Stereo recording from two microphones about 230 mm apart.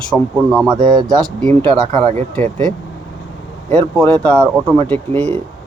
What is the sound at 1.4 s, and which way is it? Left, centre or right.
Speech, right.